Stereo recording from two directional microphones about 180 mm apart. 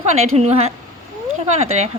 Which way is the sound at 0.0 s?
35° right (ahead or behind).